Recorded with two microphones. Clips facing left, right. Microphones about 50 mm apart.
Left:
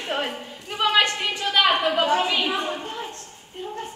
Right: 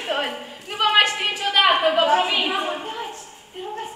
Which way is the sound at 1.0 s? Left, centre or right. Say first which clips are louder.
Right 2 dB; centre.